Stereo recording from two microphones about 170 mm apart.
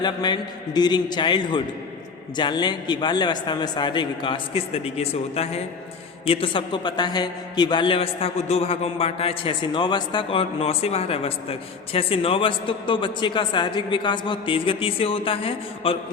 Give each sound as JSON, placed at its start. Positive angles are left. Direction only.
{"t": 0.0, "sound": "a man's voice", "side_deg": 25}